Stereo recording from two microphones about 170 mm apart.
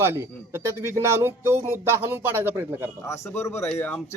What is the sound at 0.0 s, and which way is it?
Speech, 15° right (ahead or behind).